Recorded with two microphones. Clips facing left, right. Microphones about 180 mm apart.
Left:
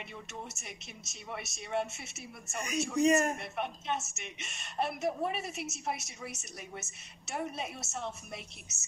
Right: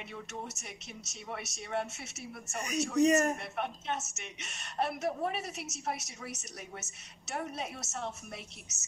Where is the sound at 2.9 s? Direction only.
40° right (ahead or behind).